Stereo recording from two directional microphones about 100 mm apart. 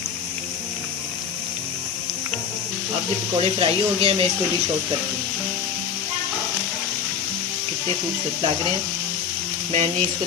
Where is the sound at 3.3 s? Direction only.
75° right (ahead or behind).